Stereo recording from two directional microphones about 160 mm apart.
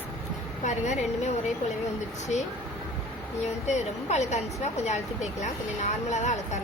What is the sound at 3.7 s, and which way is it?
Speech, 45° left (ahead or behind).